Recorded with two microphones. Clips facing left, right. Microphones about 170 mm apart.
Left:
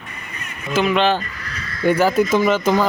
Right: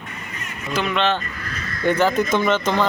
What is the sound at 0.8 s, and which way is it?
Speech, 5° left (ahead or behind).